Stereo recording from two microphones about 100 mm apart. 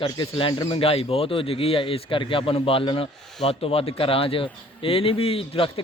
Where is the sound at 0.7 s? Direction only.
70° left (ahead or behind).